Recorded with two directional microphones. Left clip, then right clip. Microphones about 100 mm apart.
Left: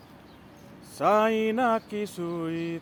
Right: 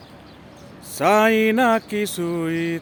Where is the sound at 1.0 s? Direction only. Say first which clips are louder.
Right 6 dB; 35° right (ahead or behind).